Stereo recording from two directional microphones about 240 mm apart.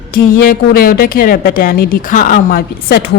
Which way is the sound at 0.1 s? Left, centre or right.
Left.